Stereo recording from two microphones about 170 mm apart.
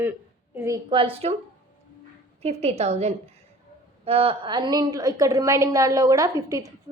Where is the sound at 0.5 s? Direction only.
15° right (ahead or behind).